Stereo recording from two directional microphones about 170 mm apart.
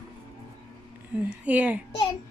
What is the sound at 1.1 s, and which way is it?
Speech, 10° right (ahead or behind).